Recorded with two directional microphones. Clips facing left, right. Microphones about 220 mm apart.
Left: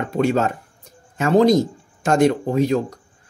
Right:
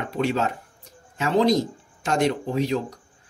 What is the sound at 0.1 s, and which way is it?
Speech, 45° left (ahead or behind).